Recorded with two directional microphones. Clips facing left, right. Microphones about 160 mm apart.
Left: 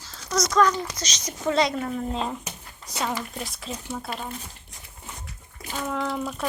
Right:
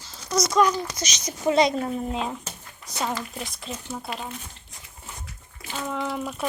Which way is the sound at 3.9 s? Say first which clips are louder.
Even; centre (ahead or behind).